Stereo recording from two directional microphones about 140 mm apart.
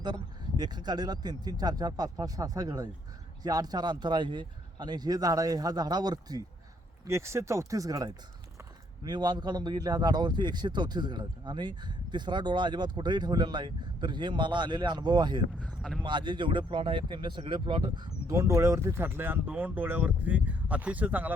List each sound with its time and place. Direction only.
0.0 s a man's voice: 30° right (ahead or behind); by 21.3 s 10° right (ahead or behind)